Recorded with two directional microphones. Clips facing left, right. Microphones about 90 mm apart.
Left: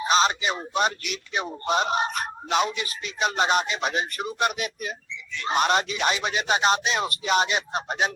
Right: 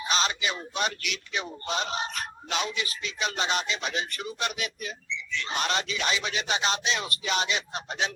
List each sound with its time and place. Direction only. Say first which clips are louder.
0.0 s speech: left 6 dB; 40° left (ahead or behind)